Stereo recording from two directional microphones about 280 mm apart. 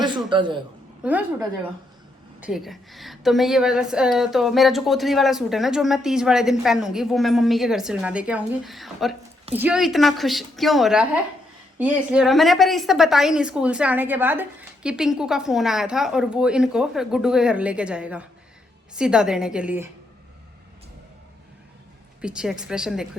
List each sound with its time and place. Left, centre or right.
0.3 s a man's voice: centre
1.0 s a woman's voice: centre
22.2 s a woman's voice: centre